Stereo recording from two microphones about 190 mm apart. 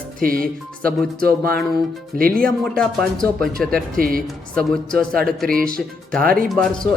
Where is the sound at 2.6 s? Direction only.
5° left (ahead or behind).